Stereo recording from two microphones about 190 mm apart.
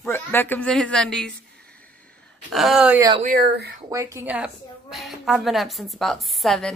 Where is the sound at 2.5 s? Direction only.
Centre (ahead or behind).